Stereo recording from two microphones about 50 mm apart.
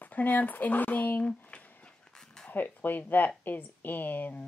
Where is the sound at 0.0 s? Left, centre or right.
Left.